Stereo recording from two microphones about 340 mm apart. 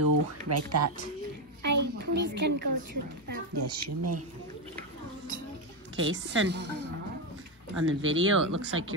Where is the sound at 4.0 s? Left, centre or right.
Right.